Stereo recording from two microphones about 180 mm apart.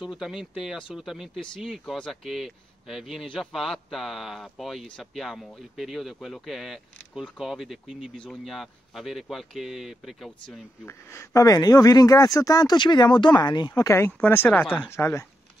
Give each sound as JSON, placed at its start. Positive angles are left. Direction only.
{"t": 0.0, "sound": "speech", "side_deg": -5}
{"t": 10.9, "sound": "speech", "side_deg": 15}